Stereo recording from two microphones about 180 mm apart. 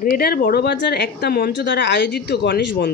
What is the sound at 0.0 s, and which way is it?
Speech, 55° left (ahead or behind).